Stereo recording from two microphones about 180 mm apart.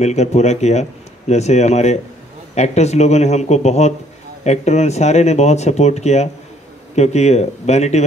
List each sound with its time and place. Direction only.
0.0 s speech: 40° left (ahead or behind)